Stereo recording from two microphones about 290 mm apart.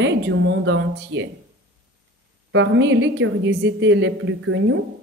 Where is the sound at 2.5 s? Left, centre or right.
Right.